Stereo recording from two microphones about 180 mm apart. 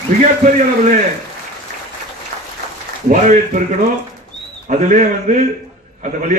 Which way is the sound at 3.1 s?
45° right (ahead or behind).